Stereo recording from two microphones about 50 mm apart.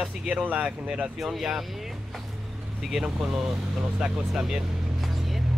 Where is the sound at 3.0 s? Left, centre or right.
Centre.